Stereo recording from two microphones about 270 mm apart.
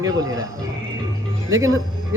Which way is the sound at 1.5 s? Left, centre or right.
Centre.